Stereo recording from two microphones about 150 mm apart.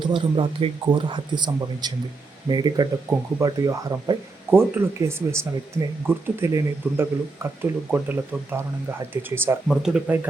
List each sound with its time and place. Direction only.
0.0 s speech: 30° right (ahead or behind)
3.1 s speech: 20° right (ahead or behind)
9.6 s speech: 5° right (ahead or behind)